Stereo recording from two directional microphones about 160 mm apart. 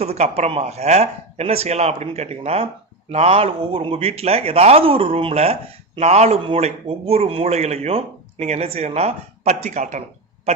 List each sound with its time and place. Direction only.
0.0 s a man's voice: 40° right (ahead or behind)